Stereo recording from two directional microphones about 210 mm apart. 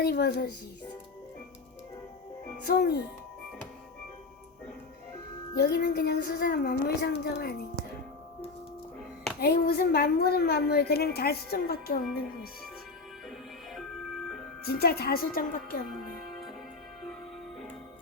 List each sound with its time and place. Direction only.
0.0 s a woman's voice: 50° left (ahead or behind)
2.6 s a woman's voice: 50° left (ahead or behind)
5.5 s a woman's voice: 50° left (ahead or behind)
9.4 s a woman's voice: 50° left (ahead or behind)
14.6 s a woman's voice: 50° left (ahead or behind)